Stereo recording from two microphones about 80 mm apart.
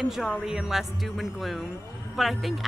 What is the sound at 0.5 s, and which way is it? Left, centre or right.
Speech, centre.